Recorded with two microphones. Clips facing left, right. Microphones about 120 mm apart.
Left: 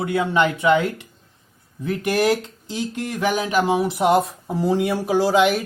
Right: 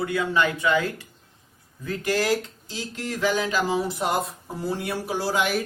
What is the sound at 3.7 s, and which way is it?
Speech, 65° left (ahead or behind).